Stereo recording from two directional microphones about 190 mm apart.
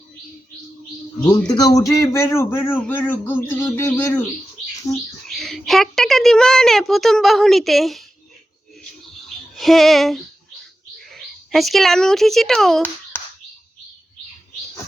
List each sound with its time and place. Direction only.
1.5 s a man's voice: 20° left (ahead or behind)
5.3 s a woman's voice: centre (ahead or behind)
9.6 s speech: centre (ahead or behind)
13.1 s bird: 10° left (ahead or behind)